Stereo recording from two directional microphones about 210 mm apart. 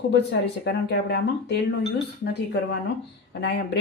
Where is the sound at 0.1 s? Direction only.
55° left (ahead or behind).